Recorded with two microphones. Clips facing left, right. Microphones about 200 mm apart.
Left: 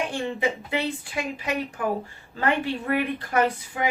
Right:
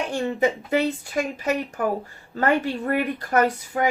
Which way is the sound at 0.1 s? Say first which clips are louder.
Right 4 dB; 45° right (ahead or behind).